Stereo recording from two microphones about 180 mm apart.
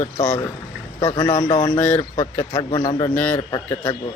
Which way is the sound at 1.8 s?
5° left (ahead or behind).